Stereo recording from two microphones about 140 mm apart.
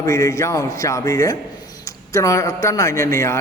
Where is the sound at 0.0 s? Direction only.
25° left (ahead or behind).